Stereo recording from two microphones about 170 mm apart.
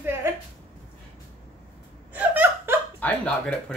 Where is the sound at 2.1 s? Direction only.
10° right (ahead or behind).